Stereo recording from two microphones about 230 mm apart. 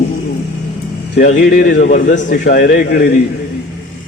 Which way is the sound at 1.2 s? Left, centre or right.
Left.